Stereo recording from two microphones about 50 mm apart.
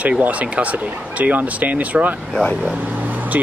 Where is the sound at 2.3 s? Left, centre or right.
Centre.